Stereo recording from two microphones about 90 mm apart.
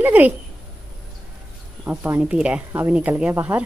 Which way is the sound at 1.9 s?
20° right (ahead or behind).